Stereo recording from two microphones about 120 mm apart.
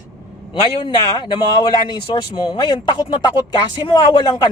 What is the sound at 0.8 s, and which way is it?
Speech, 40° left (ahead or behind).